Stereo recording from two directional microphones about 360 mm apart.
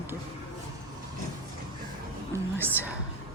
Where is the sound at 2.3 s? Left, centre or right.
Centre.